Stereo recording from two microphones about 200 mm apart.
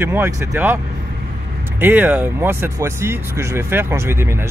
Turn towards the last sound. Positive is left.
turn(degrees=-10)  # may be behind; listen again after turning